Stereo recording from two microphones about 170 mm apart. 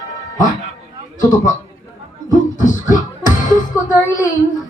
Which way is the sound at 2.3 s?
50° left (ahead or behind).